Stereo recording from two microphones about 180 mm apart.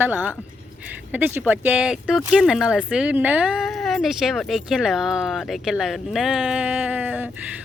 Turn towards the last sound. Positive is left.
turn(degrees=-10)  # may be behind; listen again after turning